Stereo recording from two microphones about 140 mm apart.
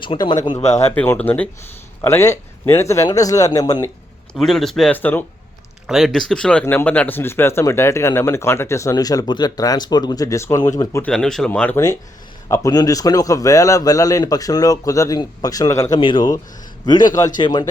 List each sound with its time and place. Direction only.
0.0 s speech: 35° left (ahead or behind)
0.6 s speech: 50° left (ahead or behind)
0.9 s speech: 15° left (ahead or behind)
4.4 s speech: 5° left (ahead or behind); by 10.7 s 20° left (ahead or behind)
11.0 s speech: 5° left (ahead or behind)
12.5 s speech: 25° left (ahead or behind)
16.0 s speech: 35° left (ahead or behind)